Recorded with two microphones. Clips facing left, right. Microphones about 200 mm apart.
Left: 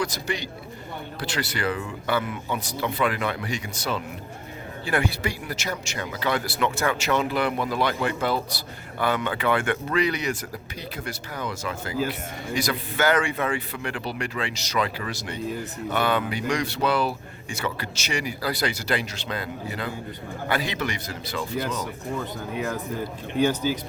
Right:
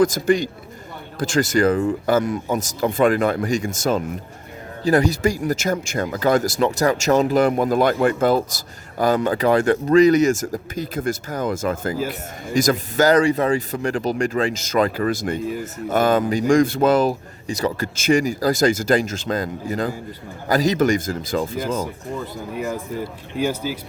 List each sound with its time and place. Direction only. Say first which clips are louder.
0.0 s speech: right 12 dB; 50° right (ahead or behind)
22.5 s speech: right 3 dB; 5° right (ahead or behind)